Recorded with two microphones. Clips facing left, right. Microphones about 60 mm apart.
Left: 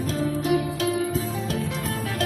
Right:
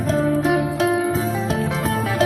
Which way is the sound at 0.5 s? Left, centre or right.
Right.